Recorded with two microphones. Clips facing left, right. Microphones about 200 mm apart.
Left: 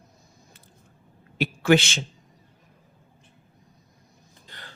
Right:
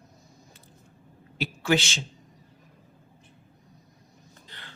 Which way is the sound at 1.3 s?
55° left (ahead or behind).